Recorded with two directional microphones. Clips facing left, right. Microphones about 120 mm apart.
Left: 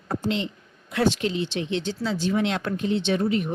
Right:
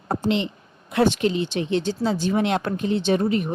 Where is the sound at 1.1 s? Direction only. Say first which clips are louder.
Right 4 dB; 50° right (ahead or behind).